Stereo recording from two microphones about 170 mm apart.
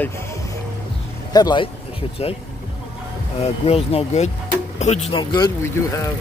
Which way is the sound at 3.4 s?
35° left (ahead or behind).